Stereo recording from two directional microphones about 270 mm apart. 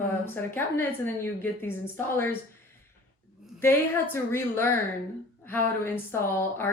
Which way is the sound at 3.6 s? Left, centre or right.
Centre.